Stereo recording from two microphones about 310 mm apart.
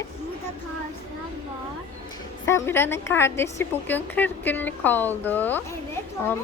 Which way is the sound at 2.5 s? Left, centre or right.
Centre.